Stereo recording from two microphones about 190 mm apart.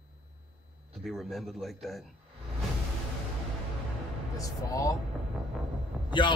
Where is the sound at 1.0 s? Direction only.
Centre (ahead or behind).